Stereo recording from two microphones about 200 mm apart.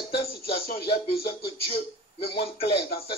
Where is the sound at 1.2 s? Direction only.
30° left (ahead or behind).